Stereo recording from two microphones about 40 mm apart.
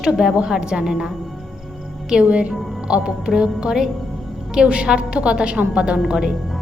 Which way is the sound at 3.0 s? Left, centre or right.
Centre.